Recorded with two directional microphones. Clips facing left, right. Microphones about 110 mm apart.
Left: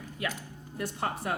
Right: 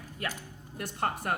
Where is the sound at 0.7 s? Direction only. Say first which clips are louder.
Even; 50° right (ahead or behind).